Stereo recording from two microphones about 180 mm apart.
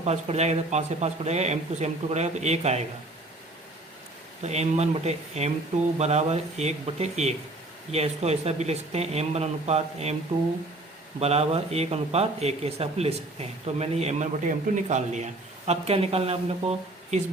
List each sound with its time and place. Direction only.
0.0 s speech: 35° right (ahead or behind)
4.4 s speech: 40° right (ahead or behind)
11.2 s speech: 35° right (ahead or behind)